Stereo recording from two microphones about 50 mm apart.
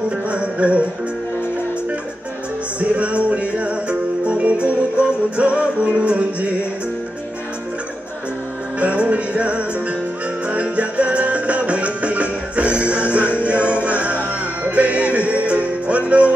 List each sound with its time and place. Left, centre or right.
0.3 s music: right
2.8 s music: right
8.7 s music: right